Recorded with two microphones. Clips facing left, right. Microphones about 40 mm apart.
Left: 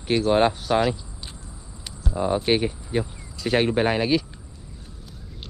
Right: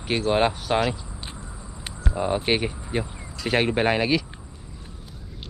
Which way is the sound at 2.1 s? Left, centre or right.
Right.